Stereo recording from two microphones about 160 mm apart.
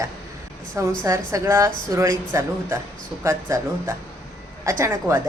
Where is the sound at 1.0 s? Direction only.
20° right (ahead or behind).